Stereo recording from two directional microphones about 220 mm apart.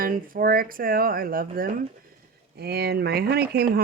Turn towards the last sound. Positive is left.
turn(degrees=-45)  # may be behind; listen again after turning